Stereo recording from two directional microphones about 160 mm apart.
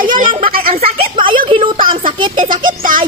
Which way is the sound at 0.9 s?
30° right (ahead or behind).